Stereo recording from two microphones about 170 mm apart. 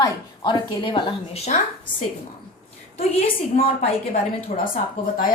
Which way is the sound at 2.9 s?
40° left (ahead or behind).